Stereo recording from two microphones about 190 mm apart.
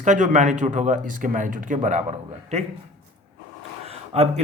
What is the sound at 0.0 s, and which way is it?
Speech, 40° right (ahead or behind).